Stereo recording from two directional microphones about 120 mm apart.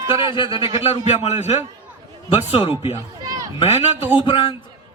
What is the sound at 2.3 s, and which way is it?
A man's voice, 50° left (ahead or behind).